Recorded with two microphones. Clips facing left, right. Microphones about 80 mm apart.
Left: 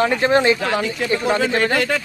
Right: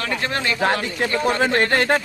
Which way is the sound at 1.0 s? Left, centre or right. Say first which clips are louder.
Right 1 dB; right.